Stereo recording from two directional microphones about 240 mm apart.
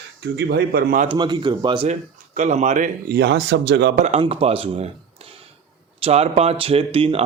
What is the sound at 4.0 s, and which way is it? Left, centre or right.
Speech, right.